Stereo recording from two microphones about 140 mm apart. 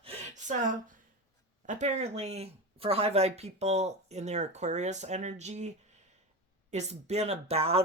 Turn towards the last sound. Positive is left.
turn(degrees=-45)  # may be behind; listen again after turning